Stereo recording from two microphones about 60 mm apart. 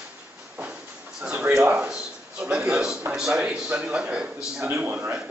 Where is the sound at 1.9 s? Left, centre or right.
Centre.